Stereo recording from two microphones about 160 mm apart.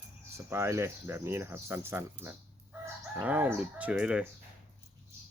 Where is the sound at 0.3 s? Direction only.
15° right (ahead or behind).